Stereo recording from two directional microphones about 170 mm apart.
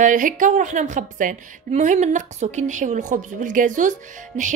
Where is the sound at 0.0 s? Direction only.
50° right (ahead or behind).